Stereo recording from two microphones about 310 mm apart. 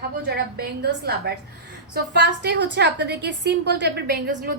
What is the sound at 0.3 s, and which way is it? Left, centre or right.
A woman's voice, right.